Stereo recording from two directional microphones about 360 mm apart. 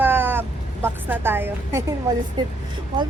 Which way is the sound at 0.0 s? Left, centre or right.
Centre.